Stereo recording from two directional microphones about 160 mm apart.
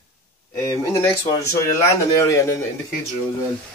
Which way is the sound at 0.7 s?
20° left (ahead or behind).